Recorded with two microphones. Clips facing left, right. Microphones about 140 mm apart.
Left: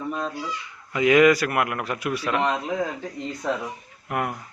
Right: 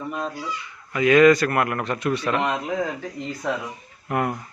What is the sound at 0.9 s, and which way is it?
A man's voice, 15° left (ahead or behind).